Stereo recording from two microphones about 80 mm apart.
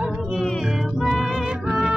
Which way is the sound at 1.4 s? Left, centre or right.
Centre.